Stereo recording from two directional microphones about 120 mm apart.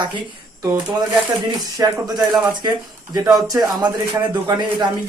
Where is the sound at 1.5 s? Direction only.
35° right (ahead or behind).